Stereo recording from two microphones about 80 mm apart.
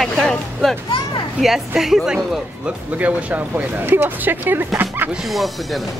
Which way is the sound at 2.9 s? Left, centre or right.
Centre.